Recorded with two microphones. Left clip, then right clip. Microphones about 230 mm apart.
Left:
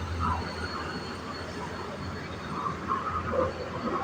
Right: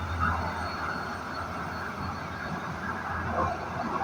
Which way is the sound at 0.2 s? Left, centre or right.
Centre.